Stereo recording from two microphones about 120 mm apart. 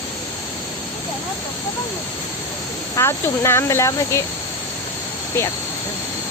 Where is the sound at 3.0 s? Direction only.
20° left (ahead or behind).